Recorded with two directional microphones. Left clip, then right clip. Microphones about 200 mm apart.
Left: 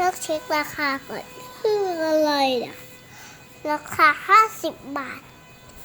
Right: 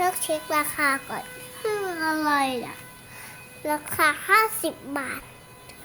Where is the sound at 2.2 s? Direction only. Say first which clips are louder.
Left 3 dB; centre (ahead or behind).